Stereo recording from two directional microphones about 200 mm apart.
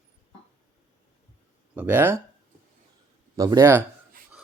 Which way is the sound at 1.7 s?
10° right (ahead or behind).